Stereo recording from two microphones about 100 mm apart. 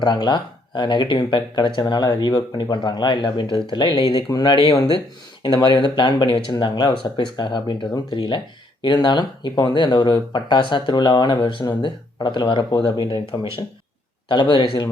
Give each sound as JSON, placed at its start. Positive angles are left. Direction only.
{"t": 0.0, "sound": "speech", "side_deg": 45}
{"t": 4.3, "sound": "speech", "side_deg": 45}
{"t": 4.6, "sound": "speech", "side_deg": 70}
{"t": 5.4, "sound": "speech", "side_deg": 50}